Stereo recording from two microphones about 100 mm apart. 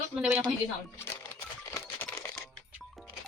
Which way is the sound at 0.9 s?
25° left (ahead or behind).